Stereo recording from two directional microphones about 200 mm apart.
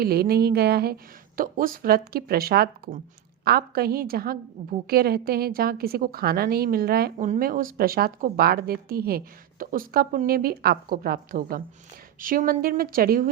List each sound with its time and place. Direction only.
0.0 s speech: 50° right (ahead or behind)